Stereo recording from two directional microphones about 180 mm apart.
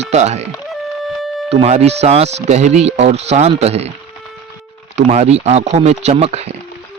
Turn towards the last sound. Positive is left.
turn(degrees=-35)  # may be behind; listen again after turning